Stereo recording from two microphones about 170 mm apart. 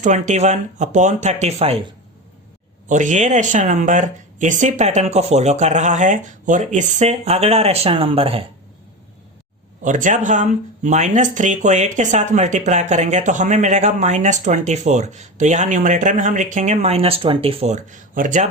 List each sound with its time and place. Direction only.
0.0 s speech: 45° right (ahead or behind)
2.9 s speech: 45° right (ahead or behind)
9.8 s speech: 45° right (ahead or behind)